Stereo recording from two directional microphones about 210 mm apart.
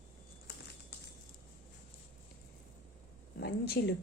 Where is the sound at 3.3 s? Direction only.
50° left (ahead or behind).